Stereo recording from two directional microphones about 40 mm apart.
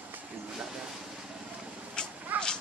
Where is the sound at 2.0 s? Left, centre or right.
Centre.